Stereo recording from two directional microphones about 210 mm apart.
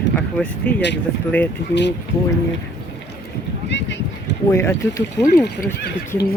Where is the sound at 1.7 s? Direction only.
55° left (ahead or behind).